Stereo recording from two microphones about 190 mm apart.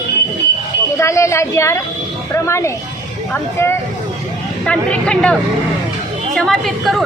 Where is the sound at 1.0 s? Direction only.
15° left (ahead or behind).